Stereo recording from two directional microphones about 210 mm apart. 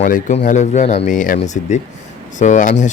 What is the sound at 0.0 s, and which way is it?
Speech, 35° left (ahead or behind).